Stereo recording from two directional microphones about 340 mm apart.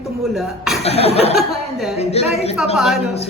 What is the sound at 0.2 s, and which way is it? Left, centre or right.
Speech, centre.